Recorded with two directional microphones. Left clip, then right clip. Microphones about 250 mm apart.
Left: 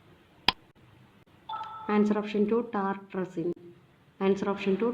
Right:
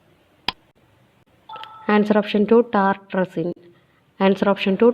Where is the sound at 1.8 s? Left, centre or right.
Right.